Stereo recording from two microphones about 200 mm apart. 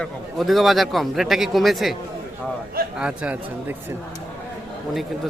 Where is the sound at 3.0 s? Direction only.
5° right (ahead or behind).